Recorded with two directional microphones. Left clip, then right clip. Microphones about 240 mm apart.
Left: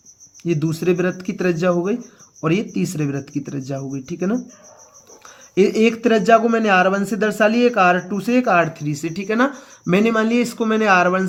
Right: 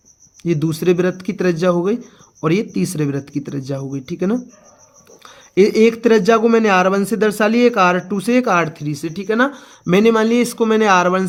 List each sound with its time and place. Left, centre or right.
0.4 s speech: right
5.5 s speech: right